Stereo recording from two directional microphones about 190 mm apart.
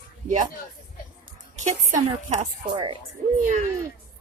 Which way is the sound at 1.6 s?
40° right (ahead or behind).